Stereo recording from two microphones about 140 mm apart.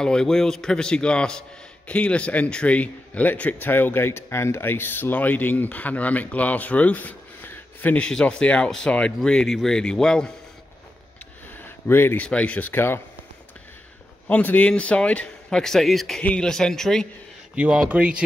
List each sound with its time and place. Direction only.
0.0 s a man's voice: 5° left (ahead or behind)
11.5 s speech: 15° left (ahead or behind)
14.2 s a man's voice: 10° left (ahead or behind)
17.6 s speech: 10° right (ahead or behind)